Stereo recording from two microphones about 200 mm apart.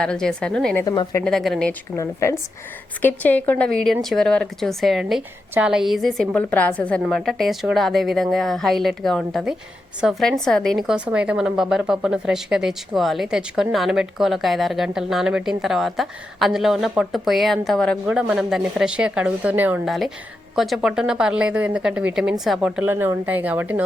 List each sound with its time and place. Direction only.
0.0 s a woman's voice: 5° left (ahead or behind)
0.9 s a woman's voice: 20° left (ahead or behind)
1.2 s a woman's voice: centre (ahead or behind)
2.2 s a woman's voice: 15° left (ahead or behind); by 23.8 s 10° right (ahead or behind)